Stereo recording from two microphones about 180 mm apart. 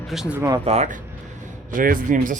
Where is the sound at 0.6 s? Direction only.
35° right (ahead or behind).